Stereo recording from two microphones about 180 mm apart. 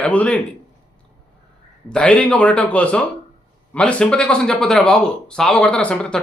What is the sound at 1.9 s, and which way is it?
Speech, 5° left (ahead or behind).